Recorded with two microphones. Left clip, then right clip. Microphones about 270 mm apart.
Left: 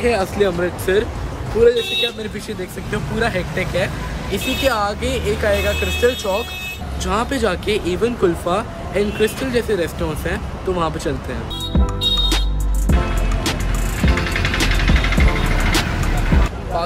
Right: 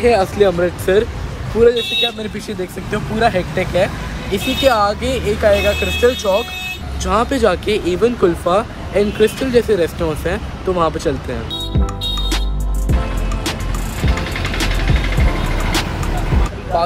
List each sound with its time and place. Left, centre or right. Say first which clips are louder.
0.0 s speech: right 5 dB; centre
14.0 s music: left 2 dB; right
15.7 s music: right 2 dB; centre